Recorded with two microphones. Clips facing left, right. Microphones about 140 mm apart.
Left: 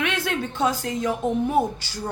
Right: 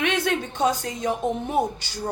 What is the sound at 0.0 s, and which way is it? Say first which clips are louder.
A woman's voice: right 2 dB; 20° right (ahead or behind).